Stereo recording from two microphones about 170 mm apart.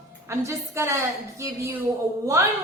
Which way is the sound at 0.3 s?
15° right (ahead or behind).